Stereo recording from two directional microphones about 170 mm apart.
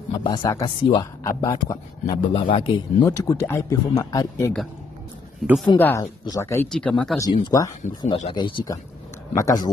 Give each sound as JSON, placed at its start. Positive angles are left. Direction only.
{"t": 0.1, "sound": "speech", "side_deg": 25}
{"t": 3.1, "sound": "speech", "side_deg": 20}
{"t": 5.8, "sound": "speech", "side_deg": 10}
{"t": 7.4, "sound": "speech", "side_deg": 25}